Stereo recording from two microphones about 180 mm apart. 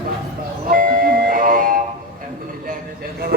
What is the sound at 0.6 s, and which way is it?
Train, 50° right (ahead or behind).